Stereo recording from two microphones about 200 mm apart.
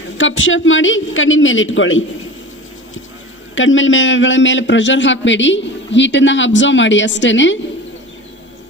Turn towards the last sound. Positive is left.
turn(degrees=65)  # may be behind; listen again after turning